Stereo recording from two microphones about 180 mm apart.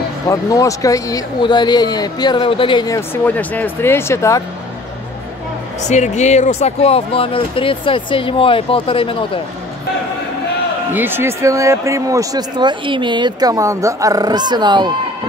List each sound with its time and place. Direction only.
0.3 s speech: 20° left (ahead or behind)
3.3 s speech: 10° left (ahead or behind)
5.9 s speech: 40° left (ahead or behind)
10.9 s speech: 10° right (ahead or behind)